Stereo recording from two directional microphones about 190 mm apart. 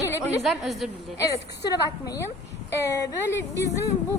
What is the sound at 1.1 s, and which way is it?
A woman's voice, 20° left (ahead or behind).